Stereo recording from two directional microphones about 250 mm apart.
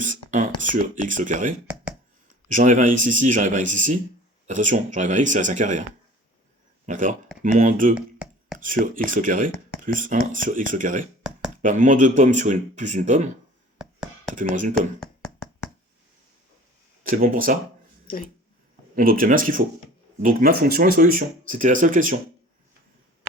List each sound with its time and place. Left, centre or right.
0.0 s a sound: right
0.6 s speech: right
6.8 s speech: right
7.9 s a sound: centre
8.5 s speech: right
13.7 s a sound: centre
14.5 s speech: right
14.8 s speech: centre
17.0 s speech: right
18.9 s speech: right